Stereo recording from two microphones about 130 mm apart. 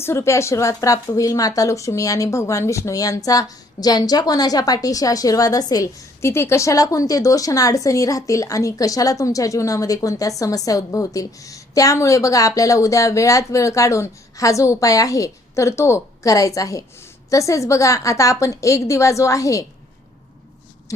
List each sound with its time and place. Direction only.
0.0 s a woman's voice: 20° left (ahead or behind)